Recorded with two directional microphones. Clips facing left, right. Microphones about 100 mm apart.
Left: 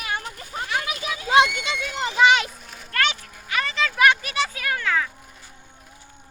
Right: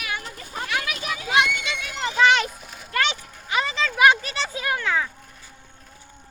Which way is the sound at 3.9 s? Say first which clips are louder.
Right 1 dB; 20° right (ahead or behind).